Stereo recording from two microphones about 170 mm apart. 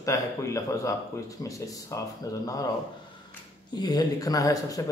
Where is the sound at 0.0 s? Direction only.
20° left (ahead or behind).